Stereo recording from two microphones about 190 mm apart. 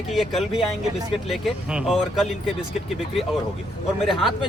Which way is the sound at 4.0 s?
Centre (ahead or behind).